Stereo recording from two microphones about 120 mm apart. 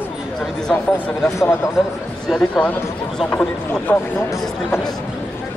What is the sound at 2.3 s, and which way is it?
Speech, 10° left (ahead or behind).